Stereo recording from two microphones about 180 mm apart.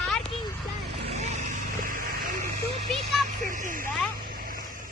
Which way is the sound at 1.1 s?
40° right (ahead or behind).